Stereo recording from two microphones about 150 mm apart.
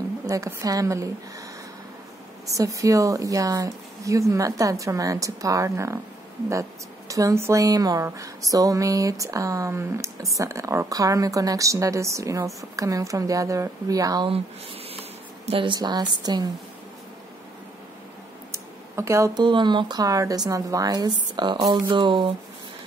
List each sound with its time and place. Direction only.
0.3 s a woman's voice: 20° right (ahead or behind)
2.5 s a woman's voice: 20° right (ahead or behind)
7.1 s a woman's voice: 20° right (ahead or behind)
15.4 s a woman's voice: 35° right (ahead or behind)
18.5 s a sound: 20° right (ahead or behind)
19.4 s a woman's voice: 30° right (ahead or behind)